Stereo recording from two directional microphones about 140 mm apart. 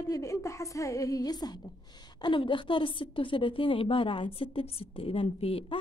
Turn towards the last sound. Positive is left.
turn(degrees=45)  # may be behind; listen again after turning